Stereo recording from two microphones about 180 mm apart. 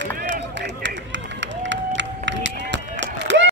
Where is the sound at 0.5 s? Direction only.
80° right.